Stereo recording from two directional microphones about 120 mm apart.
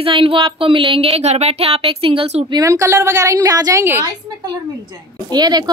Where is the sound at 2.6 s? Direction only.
25° right (ahead or behind).